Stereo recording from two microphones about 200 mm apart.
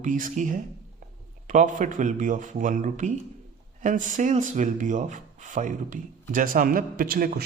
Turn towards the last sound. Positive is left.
turn(degrees=-50)  # may be behind; listen again after turning